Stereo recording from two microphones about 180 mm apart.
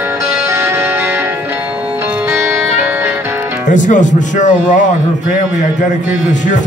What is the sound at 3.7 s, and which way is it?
Speech, 45° left (ahead or behind).